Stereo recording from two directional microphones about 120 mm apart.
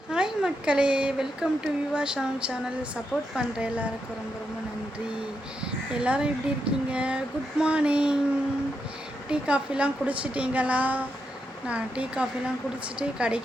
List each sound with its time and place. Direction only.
0.1 s a woman's voice: 5° right (ahead or behind)
5.9 s a woman's voice: 10° right (ahead or behind)
9.3 s a woman's voice: 10° right (ahead or behind)